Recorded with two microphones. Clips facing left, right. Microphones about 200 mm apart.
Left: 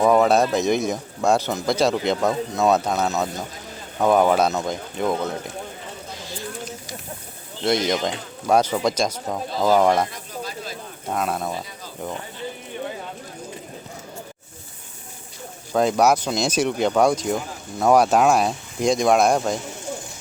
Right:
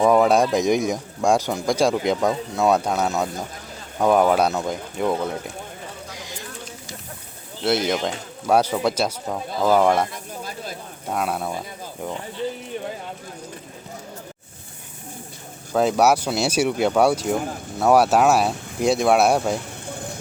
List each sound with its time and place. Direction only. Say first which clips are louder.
0.0 s a man's voice: even; 10° right (ahead or behind)
6.1 s a sound: left 1 dB; 15° right (ahead or behind)
7.6 s a man's voice: even; 5° right (ahead or behind)
11.1 s a man's voice: even; 10° right (ahead or behind)
15.7 s a man's voice: even; 5° right (ahead or behind)